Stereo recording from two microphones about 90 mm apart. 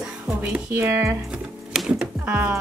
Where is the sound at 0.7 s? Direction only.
25° right (ahead or behind).